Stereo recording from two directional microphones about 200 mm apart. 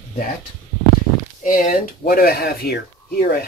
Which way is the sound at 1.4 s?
40° left (ahead or behind).